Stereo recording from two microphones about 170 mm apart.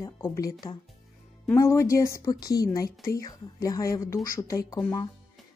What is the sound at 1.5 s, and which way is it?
A woman's voice, 20° left (ahead or behind).